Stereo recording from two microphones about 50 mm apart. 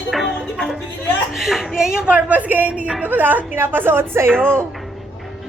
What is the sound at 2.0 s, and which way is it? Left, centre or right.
Speech, right.